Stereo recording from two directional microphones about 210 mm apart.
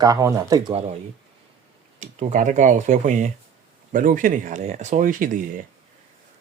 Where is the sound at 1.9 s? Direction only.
30° right (ahead or behind).